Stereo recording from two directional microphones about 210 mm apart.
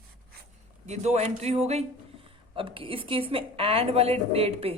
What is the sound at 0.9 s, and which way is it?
Speech, 30° right (ahead or behind).